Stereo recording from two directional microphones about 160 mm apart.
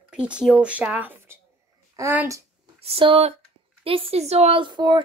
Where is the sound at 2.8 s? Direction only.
35° right (ahead or behind).